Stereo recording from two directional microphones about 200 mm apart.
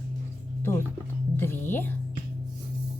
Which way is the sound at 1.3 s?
10° left (ahead or behind).